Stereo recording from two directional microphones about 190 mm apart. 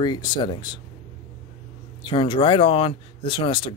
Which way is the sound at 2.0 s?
25° left (ahead or behind).